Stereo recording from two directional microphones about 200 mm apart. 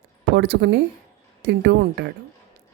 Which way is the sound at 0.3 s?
60° right (ahead or behind).